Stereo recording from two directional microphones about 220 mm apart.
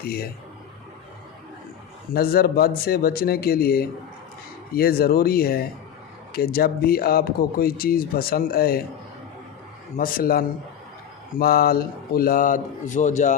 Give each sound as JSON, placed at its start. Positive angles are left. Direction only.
{"t": 0.0, "sound": "speech", "side_deg": 45}
{"t": 2.1, "sound": "speech", "side_deg": 45}
{"t": 10.0, "sound": "speech", "side_deg": 40}